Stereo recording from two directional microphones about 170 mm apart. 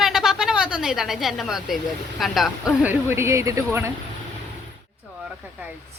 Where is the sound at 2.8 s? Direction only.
10° right (ahead or behind).